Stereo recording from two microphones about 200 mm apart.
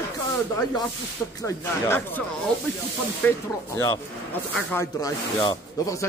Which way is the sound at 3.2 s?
10° left (ahead or behind).